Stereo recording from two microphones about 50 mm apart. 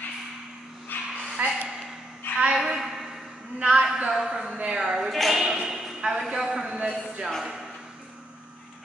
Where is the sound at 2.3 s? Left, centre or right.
Left.